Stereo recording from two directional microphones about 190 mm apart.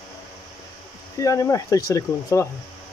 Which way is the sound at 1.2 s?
15° left (ahead or behind).